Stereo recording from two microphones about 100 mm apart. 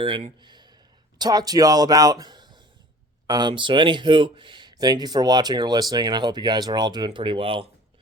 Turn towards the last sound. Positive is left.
turn(degrees=-65)  # may be behind; listen again after turning